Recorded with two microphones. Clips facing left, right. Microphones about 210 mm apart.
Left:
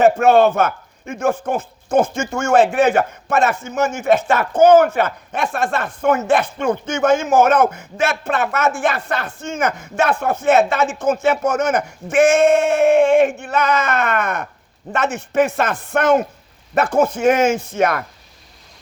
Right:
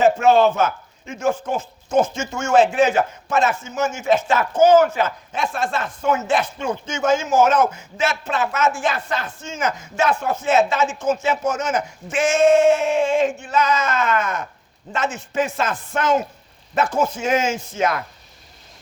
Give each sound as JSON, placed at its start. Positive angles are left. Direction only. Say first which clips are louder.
{"t": 0.0, "sound": "a man's voice", "louder": "left 3 dB", "side_deg": 55}